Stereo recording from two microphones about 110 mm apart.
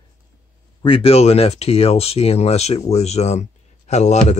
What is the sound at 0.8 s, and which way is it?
Speech, 55° left (ahead or behind).